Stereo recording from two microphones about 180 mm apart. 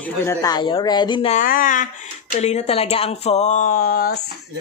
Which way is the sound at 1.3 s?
50° left (ahead or behind).